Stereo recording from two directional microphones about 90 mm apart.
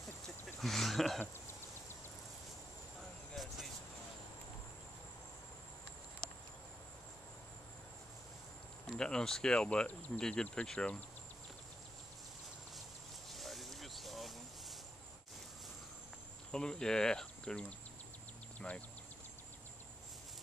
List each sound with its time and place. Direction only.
0.6 s speech: centre (ahead or behind)
1.2 s a sound: 25° left (ahead or behind)
3.3 s vehicle: centre (ahead or behind)
8.8 s speech: 10° left (ahead or behind)
13.3 s a sound: centre (ahead or behind)
16.5 s speech: 10° left (ahead or behind)
18.6 s speech: 20° left (ahead or behind)